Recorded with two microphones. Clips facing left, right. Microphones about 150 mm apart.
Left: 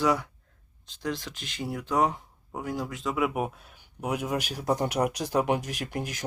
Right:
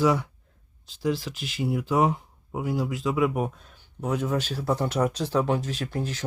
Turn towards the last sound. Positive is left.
turn(degrees=15)  # may be behind; listen again after turning